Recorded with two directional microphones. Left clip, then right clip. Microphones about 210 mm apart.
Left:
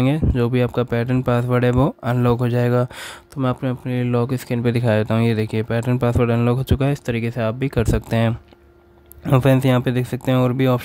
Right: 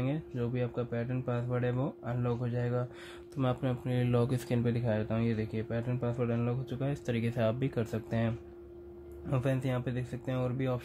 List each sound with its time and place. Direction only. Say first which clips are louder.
0.0 s speech: left 15 dB; 55° left (ahead or behind)
3.3 s speech: left 10 dB; 35° left (ahead or behind); by 10.8 s 55° left (ahead or behind)